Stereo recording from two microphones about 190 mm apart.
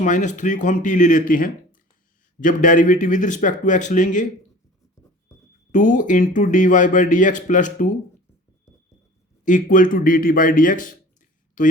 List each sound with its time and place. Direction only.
0.0 s speech: 40° left (ahead or behind)
5.7 s speech: 45° left (ahead or behind)
9.4 s a man's voice: 45° left (ahead or behind)